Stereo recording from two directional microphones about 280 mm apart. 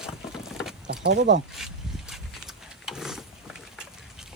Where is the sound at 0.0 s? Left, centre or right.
Centre.